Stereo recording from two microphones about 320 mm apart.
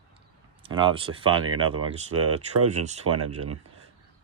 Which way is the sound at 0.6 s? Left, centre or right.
Centre.